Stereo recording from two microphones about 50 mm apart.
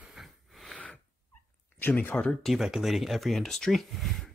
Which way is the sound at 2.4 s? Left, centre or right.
Centre.